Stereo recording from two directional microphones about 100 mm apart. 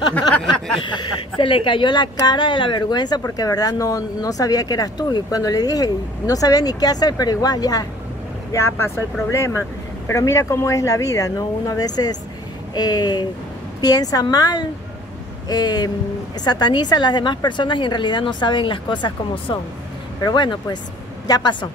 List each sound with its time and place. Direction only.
0.8 s a woman's voice: 50° left (ahead or behind)
8.5 s a woman's voice: 25° left (ahead or behind); by 19.6 s 60° left (ahead or behind)
20.2 s a woman's voice: 45° left (ahead or behind)